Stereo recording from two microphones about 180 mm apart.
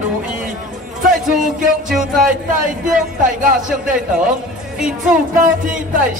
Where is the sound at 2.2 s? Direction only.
50° right (ahead or behind).